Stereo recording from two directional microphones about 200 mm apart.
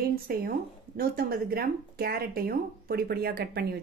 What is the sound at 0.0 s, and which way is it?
Speech, 50° right (ahead or behind).